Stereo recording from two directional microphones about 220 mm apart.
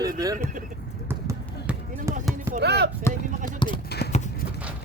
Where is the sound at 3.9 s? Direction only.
50° left (ahead or behind).